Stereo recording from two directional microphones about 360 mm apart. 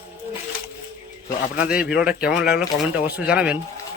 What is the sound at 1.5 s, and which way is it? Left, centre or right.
A man's voice, centre.